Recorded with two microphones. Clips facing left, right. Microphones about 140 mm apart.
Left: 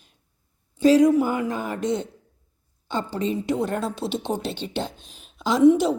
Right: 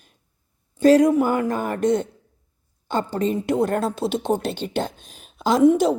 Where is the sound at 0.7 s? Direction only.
50° right (ahead or behind).